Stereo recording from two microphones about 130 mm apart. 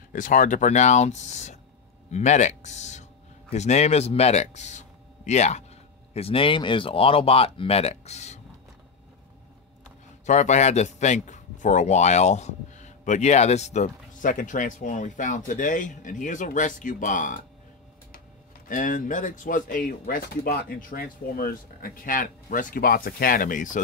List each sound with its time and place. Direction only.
0.1 s speech: 85° left; by 5.6 s 60° left (ahead or behind)
6.1 s speech: 45° left (ahead or behind)
10.2 s a man's voice: 65° left (ahead or behind); by 17.4 s 90° left
18.7 s speech: 85° left
21.8 s speech: 90° left